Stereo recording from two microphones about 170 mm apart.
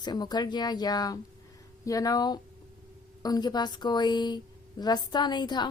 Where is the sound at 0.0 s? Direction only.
25° left (ahead or behind).